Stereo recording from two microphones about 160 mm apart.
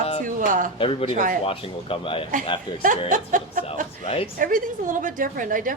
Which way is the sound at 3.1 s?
55° right (ahead or behind).